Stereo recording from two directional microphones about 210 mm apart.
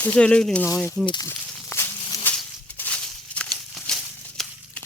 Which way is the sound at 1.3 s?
10° left (ahead or behind).